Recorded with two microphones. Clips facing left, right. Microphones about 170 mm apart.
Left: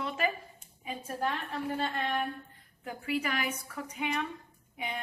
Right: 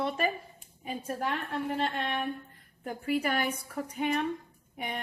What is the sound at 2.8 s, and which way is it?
Speech, 45° right (ahead or behind).